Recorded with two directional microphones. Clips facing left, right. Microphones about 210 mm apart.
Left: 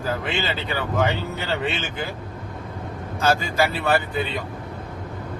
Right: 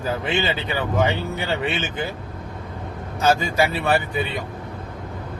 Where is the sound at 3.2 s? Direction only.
15° right (ahead or behind).